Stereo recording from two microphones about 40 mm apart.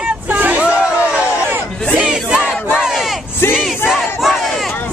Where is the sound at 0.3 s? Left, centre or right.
Right.